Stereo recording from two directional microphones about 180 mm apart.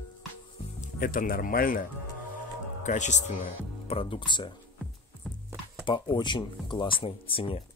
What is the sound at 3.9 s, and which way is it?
Speech, 30° left (ahead or behind).